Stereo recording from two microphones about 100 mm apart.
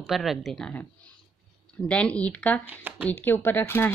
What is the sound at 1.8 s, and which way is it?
Speech, 10° left (ahead or behind).